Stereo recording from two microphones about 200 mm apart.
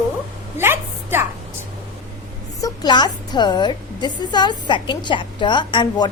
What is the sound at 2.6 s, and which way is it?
A woman's voice, 20° left (ahead or behind).